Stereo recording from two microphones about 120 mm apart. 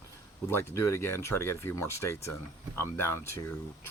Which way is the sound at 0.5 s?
25° left (ahead or behind).